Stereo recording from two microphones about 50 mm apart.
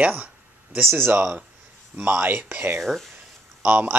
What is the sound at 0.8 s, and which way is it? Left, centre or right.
Speech, right.